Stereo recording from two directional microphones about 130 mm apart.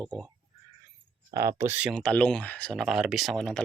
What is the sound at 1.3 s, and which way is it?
Speech, 25° right (ahead or behind).